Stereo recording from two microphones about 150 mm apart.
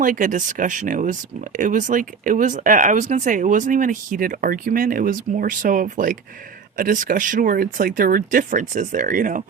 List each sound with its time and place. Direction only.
0.0 s speech: 60° right (ahead or behind)